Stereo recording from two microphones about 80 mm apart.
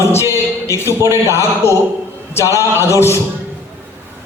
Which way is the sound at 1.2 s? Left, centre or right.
Left.